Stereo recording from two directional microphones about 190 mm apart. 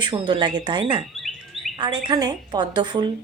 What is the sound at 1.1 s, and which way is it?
Chirp, centre (ahead or behind).